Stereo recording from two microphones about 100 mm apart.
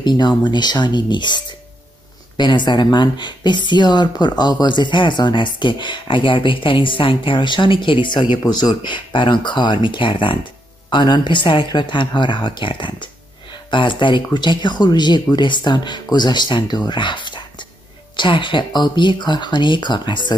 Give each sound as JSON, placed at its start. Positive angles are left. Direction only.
{"t": 0.0, "sound": "speech", "side_deg": 45}